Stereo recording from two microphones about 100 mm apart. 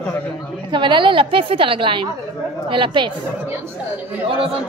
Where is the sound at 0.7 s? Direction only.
55° right (ahead or behind).